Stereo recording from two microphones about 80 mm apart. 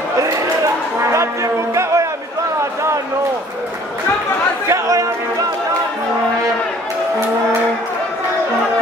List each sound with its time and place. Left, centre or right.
0.9 s brass instrument: right
2.6 s a sound: right
4.6 s chatter: right